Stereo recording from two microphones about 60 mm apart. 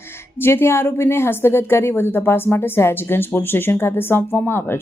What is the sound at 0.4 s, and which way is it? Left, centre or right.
A woman's voice, left.